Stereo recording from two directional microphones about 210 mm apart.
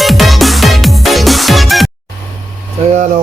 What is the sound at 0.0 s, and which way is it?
Music, centre (ahead or behind).